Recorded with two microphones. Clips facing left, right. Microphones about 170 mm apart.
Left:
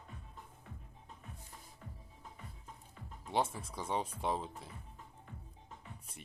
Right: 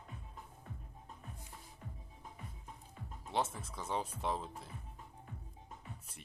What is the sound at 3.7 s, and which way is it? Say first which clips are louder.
Speech: left 2 dB; 30° left (ahead or behind).